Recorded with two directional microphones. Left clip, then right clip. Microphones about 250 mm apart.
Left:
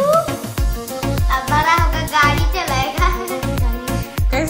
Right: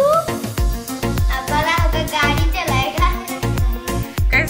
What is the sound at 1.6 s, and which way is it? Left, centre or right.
Music, left.